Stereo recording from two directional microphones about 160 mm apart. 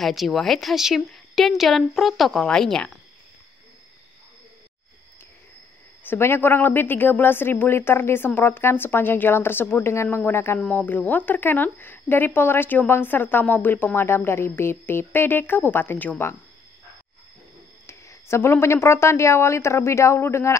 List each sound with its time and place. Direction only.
0.0 s a woman's voice: centre (ahead or behind)
6.0 s speech: 15° left (ahead or behind)
17.8 s speech: 15° left (ahead or behind)